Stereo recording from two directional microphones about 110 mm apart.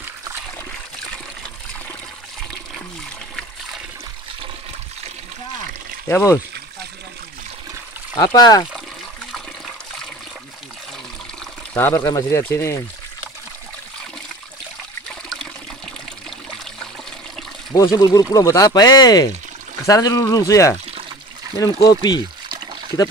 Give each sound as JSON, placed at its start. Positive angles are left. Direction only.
{"t": 6.0, "sound": "speech", "side_deg": 25}
{"t": 8.2, "sound": "speech", "side_deg": 40}
{"t": 11.7, "sound": "speech", "side_deg": 20}
{"t": 17.9, "sound": "speech", "side_deg": 30}